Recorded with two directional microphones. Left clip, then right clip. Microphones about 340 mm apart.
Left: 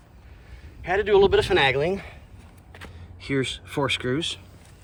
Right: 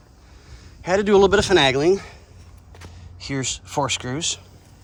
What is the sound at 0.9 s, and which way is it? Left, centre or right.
A man's voice, centre.